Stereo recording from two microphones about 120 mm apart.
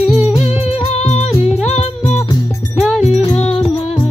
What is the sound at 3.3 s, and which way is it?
Music, 60° left (ahead or behind).